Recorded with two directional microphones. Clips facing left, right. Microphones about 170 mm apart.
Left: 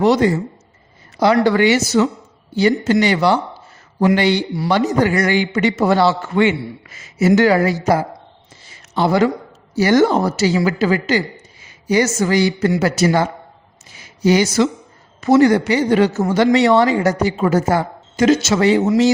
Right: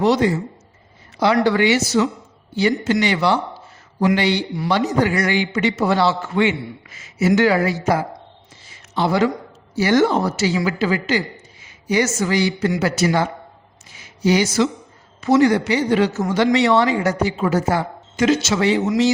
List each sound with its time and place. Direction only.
0.0 s speech: 50° left (ahead or behind)